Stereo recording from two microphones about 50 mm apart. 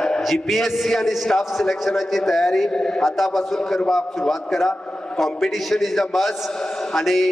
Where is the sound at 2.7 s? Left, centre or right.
Centre.